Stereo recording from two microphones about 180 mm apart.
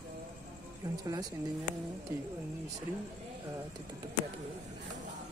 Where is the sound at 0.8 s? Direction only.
20° right (ahead or behind).